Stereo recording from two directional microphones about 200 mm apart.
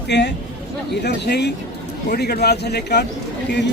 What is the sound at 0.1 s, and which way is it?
A man's voice, 60° left (ahead or behind).